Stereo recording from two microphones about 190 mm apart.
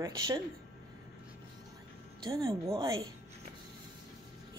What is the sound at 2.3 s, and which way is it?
Speech, 15° right (ahead or behind).